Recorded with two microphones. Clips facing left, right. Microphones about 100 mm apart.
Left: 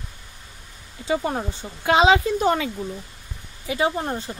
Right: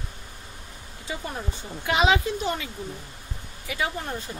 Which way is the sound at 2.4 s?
60° left (ahead or behind).